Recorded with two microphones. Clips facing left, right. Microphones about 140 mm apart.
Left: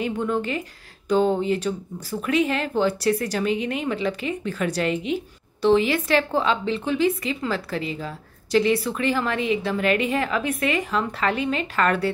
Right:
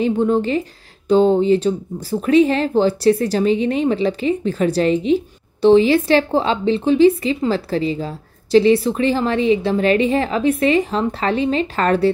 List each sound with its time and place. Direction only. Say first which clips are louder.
0.0 s speech: right 8 dB; 30° right (ahead or behind)